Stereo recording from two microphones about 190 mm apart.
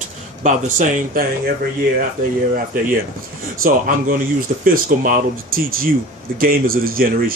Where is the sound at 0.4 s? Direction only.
45° right (ahead or behind).